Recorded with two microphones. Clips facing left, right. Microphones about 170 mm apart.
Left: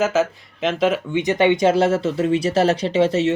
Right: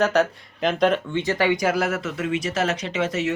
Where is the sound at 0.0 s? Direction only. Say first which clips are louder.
Left 1 dB; centre (ahead or behind).